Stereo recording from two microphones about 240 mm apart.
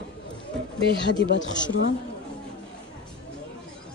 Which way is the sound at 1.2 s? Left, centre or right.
Left.